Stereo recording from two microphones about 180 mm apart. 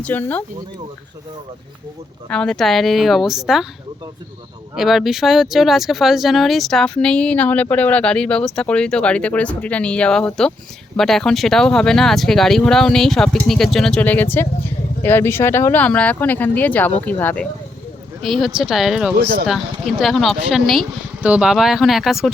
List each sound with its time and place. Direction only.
0.0 s speech: 10° left (ahead or behind)
2.3 s speech: 5° left (ahead or behind)
4.7 s speech: centre (ahead or behind)
19.1 s speech: 60° right (ahead or behind)
19.5 s speech: centre (ahead or behind)